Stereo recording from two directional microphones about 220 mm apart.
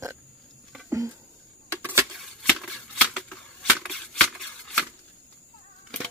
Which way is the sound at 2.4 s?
Centre (ahead or behind).